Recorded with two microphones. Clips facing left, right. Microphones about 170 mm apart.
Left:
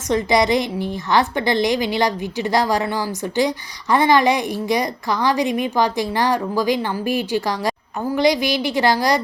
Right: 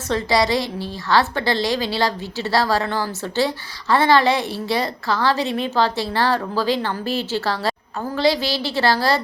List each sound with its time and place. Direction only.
0.1 s a woman's voice: 20° left (ahead or behind)